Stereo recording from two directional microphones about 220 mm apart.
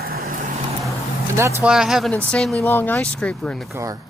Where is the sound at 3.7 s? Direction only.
15° right (ahead or behind).